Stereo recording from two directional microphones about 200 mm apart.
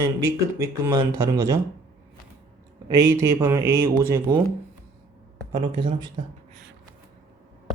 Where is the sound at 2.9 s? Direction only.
15° right (ahead or behind).